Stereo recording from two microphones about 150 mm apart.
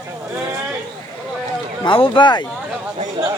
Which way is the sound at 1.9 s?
35° left (ahead or behind).